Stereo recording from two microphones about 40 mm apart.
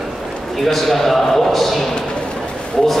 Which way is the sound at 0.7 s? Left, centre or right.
Centre.